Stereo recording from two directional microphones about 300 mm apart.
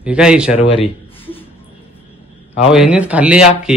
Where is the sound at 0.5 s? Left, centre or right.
Centre.